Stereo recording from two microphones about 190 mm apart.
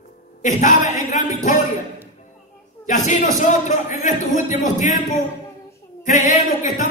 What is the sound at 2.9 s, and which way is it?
A man's voice, 40° left (ahead or behind).